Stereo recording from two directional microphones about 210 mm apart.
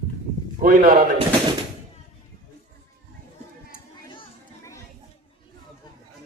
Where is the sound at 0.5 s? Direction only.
40° right (ahead or behind).